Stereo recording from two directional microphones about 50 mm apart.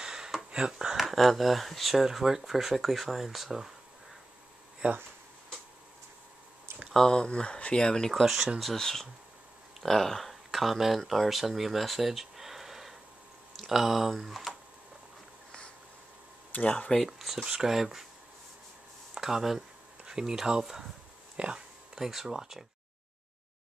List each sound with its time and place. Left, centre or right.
0.0 s a sound: centre
0.5 s speech: centre
4.8 s speech: right
7.1 s speech: centre
16.5 s speech: left
17.0 s speech: centre
19.1 s speech: centre
21.4 s speech: centre